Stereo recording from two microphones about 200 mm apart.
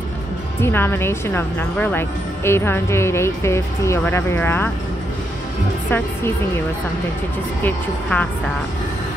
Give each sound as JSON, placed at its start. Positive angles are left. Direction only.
{"t": 0.6, "sound": "speech", "side_deg": 10}
{"t": 5.9, "sound": "speech", "side_deg": 10}
{"t": 7.6, "sound": "speech", "side_deg": 5}